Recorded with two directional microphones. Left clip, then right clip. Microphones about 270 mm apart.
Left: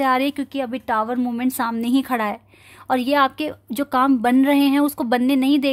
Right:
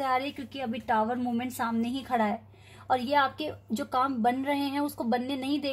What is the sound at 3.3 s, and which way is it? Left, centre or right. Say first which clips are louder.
A woman's voice: left 9 dB; left.